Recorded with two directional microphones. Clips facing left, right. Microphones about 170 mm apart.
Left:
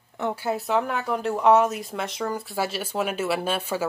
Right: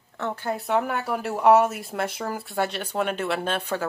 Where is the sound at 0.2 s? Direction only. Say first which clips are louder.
Left 2 dB; 10° left (ahead or behind).